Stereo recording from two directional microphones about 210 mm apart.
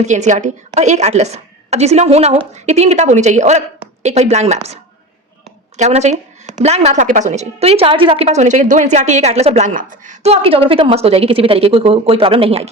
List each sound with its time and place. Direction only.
0.0 s a woman's voice: 35° right (ahead or behind)